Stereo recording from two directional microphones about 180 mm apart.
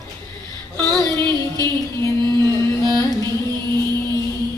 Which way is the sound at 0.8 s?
20° right (ahead or behind).